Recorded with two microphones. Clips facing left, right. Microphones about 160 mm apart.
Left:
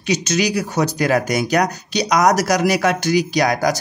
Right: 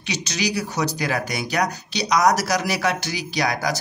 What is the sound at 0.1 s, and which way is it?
Speech, 45° left (ahead or behind).